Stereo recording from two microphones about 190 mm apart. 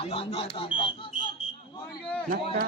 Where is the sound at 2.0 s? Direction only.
5° left (ahead or behind).